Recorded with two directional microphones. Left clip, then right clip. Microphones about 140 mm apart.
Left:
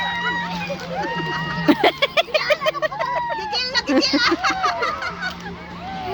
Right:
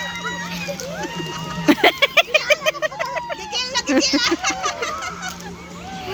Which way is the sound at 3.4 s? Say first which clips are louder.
Left 2 dB; 90° left.